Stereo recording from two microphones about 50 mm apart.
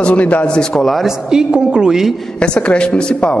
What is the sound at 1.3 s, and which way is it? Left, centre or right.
Speech, centre.